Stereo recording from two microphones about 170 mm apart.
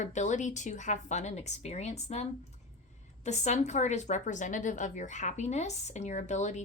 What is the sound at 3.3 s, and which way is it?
A woman's voice, 45° left (ahead or behind).